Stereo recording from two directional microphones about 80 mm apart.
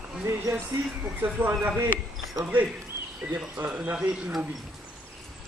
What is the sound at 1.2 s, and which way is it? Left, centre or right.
Speech, right.